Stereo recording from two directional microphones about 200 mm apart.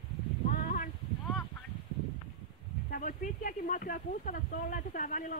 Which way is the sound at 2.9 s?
40° left (ahead or behind).